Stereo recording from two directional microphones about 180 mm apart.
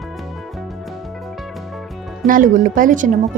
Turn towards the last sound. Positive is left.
turn(degrees=-45)  # may be behind; listen again after turning